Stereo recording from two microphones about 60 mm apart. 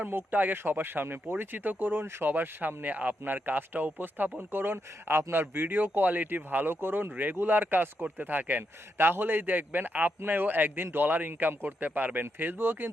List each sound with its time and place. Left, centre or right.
0.0 s speech: right